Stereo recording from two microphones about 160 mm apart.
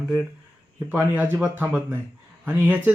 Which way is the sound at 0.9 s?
10° right (ahead or behind).